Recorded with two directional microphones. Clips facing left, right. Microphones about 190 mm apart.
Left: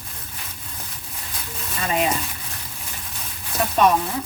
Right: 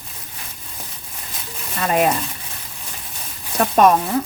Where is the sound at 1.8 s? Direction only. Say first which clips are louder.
Right 5 dB; 50° right (ahead or behind).